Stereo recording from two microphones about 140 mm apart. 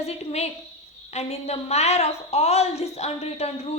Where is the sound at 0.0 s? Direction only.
50° left (ahead or behind).